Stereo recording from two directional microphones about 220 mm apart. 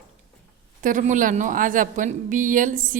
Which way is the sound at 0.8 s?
35° right (ahead or behind).